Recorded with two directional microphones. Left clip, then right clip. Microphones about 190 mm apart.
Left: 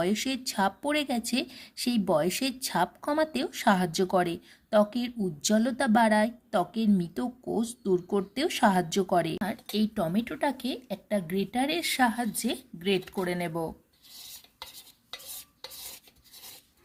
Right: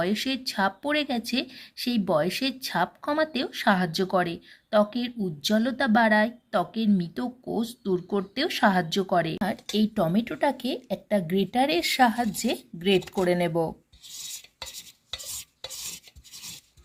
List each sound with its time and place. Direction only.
0.0 s speech: 20° left (ahead or behind)
9.4 s speech: 5° right (ahead or behind)